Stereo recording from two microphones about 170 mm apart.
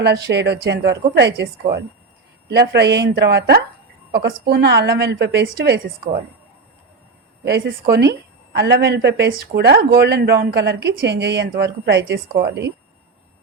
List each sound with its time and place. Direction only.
0.0 s a woman's voice: 80° right
7.4 s a woman's voice: 75° right (ahead or behind)